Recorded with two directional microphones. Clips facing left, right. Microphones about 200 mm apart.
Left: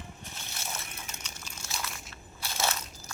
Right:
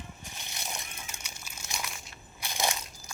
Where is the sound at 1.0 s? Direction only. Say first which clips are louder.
Left 1 dB; 10° right (ahead or behind).